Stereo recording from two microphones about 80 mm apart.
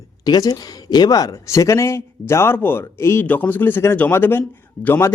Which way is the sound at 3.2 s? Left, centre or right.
Left.